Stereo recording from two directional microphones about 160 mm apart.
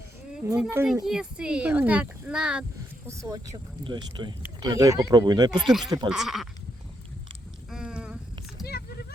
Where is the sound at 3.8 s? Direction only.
30° right (ahead or behind).